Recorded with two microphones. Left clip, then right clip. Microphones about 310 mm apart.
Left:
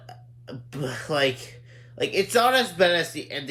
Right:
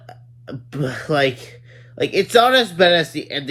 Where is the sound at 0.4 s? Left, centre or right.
Centre.